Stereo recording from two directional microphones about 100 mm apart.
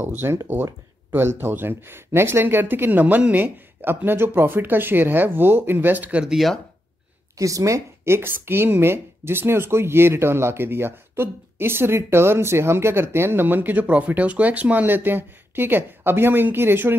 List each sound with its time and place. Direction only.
0.0 s a woman's voice: 20° right (ahead or behind)
6.3 s speech: centre (ahead or behind)
7.3 s a woman's voice: 35° right (ahead or behind)